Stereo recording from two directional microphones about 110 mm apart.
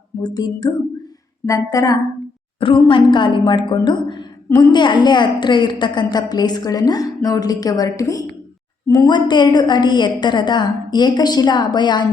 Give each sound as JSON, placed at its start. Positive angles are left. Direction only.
{"t": 0.2, "sound": "a woman's voice", "side_deg": 35}
{"t": 2.6, "sound": "a woman's voice", "side_deg": 50}
{"t": 8.9, "sound": "a woman's voice", "side_deg": 45}